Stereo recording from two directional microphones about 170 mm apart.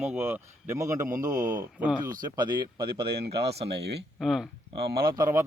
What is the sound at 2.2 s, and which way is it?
Speech, 25° right (ahead or behind).